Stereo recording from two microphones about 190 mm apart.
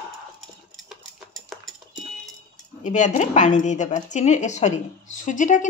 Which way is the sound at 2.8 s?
40° left (ahead or behind).